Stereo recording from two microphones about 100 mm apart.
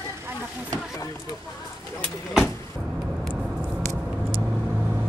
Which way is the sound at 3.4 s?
10° right (ahead or behind).